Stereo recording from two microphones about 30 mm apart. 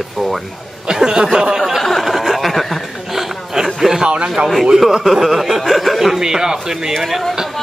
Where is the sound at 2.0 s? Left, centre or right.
Centre.